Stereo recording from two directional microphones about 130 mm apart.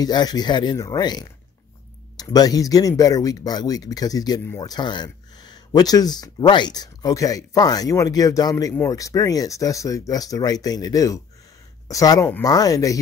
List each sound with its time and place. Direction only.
0.0 s speech: 30° left (ahead or behind)